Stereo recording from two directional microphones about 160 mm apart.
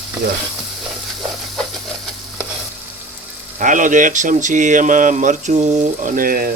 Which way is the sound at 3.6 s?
55° right (ahead or behind).